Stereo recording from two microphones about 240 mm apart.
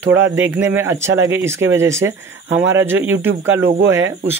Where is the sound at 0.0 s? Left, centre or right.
Centre.